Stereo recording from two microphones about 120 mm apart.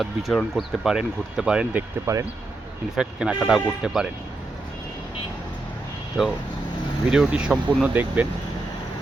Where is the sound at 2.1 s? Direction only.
25° right (ahead or behind).